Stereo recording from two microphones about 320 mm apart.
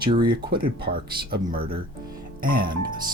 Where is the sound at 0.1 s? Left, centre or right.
Centre.